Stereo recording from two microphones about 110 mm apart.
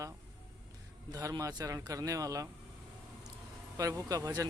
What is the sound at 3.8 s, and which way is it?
Speech, 30° right (ahead or behind).